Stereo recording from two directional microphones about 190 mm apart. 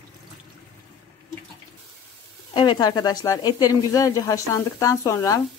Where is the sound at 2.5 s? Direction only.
25° left (ahead or behind).